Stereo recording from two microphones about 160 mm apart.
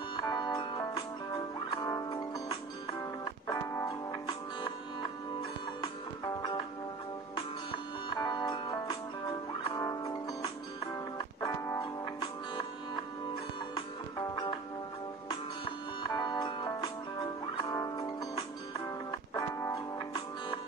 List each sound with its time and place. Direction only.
0.1 s music: 25° left (ahead or behind)
5.8 s music: 25° left (ahead or behind)
8.1 s music: 25° left (ahead or behind)
14.3 s music: 25° left (ahead or behind)
16.0 s music: 25° left (ahead or behind)